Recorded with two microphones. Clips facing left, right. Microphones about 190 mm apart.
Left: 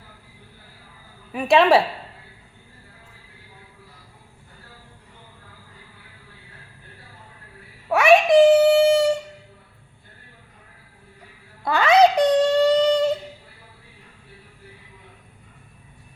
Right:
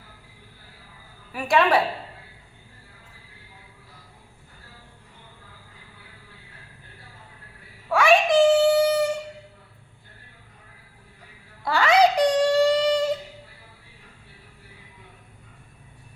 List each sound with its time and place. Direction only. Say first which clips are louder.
1.3 s a woman's voice: left 5 dB; 25° left (ahead or behind)
7.9 s child singing: left 4 dB; 25° left (ahead or behind)
11.6 s a sound: left 3 dB; 20° left (ahead or behind)